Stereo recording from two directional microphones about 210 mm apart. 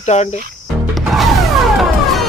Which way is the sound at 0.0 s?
30° left (ahead or behind).